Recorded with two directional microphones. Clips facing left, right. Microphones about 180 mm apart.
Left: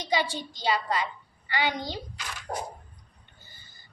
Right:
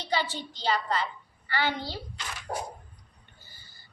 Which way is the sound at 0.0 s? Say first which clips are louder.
Left 2 dB; 15° left (ahead or behind).